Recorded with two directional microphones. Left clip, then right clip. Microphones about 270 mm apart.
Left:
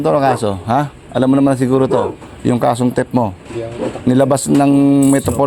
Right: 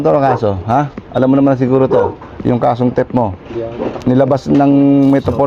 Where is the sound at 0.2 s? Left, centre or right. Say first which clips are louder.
Right 2 dB; left.